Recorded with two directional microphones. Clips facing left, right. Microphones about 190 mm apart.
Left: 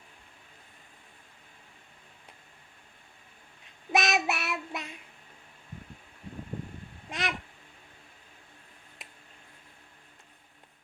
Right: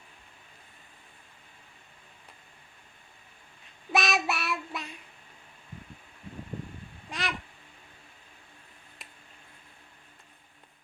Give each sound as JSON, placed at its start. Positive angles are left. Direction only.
{"t": 3.9, "sound": "child singing", "side_deg": 20}
{"t": 7.1, "sound": "babbling", "side_deg": 20}